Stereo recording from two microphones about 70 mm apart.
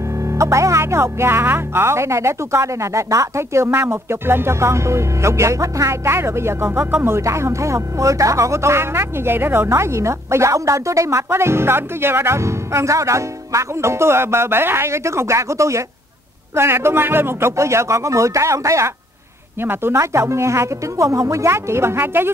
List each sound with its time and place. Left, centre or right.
0.3 s speech: right
9.7 s speech: right
19.6 s a woman's voice: right
20.0 s speech: right